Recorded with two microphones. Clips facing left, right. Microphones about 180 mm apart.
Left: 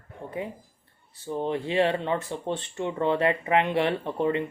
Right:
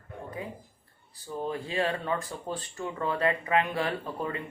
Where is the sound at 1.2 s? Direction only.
25° left (ahead or behind).